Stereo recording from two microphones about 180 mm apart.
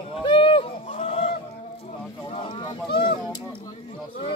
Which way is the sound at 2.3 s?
30° left (ahead or behind).